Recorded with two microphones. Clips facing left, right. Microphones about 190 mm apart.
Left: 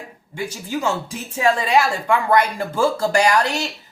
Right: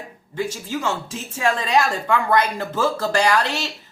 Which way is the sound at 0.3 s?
10° left (ahead or behind).